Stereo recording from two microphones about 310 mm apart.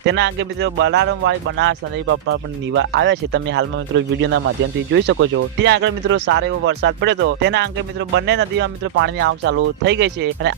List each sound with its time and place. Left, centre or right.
0.0 s speech: right